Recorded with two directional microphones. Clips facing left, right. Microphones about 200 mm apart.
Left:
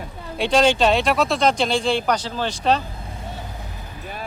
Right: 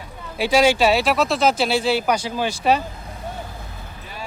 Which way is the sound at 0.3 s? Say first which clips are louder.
Right 1 dB; 5° right (ahead or behind).